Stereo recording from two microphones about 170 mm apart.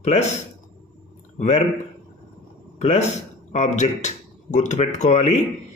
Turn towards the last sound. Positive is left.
turn(degrees=40)  # may be behind; listen again after turning